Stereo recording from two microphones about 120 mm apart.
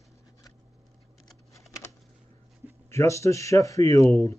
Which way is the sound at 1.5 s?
25° left (ahead or behind).